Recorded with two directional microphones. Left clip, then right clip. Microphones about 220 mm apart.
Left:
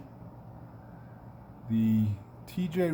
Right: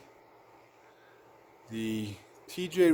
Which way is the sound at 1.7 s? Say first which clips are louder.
Left 5 dB; 45° right (ahead or behind).